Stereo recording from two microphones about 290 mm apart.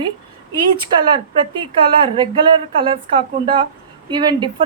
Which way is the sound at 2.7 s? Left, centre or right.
Centre.